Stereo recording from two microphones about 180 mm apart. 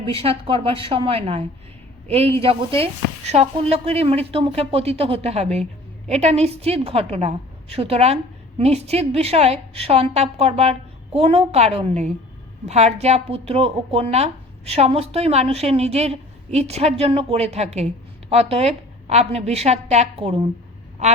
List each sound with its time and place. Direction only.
0.0 s a woman's voice: 30° right (ahead or behind)